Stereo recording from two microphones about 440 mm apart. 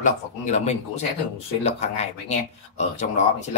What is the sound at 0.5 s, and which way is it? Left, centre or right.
Speech, centre.